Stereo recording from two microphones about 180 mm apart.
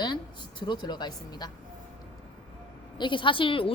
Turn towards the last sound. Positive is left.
turn(degrees=30)  # may be behind; listen again after turning